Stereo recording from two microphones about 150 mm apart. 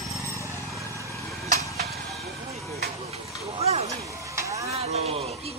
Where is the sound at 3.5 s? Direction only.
45° right (ahead or behind).